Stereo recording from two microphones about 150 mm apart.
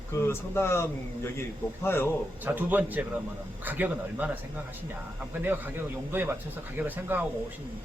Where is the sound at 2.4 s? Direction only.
10° right (ahead or behind).